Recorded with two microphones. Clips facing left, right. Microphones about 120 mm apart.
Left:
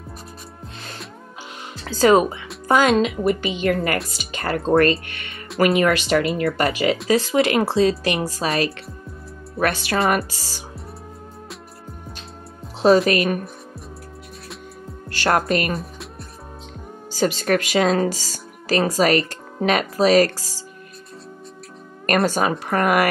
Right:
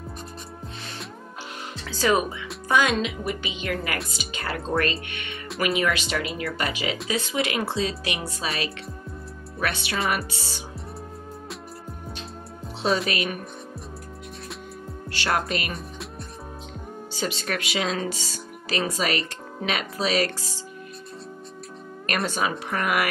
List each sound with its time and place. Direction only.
1.9 s speech: 40° left (ahead or behind)
2.9 s speech: 55° left (ahead or behind); by 10.6 s 40° left (ahead or behind)
12.8 s speech: 45° left (ahead or behind)
15.0 s speech: 45° left (ahead or behind)
17.1 s speech: 45° left (ahead or behind)
22.0 s speech: 45° left (ahead or behind)